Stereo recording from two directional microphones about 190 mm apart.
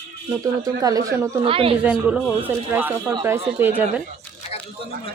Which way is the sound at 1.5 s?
30° right (ahead or behind).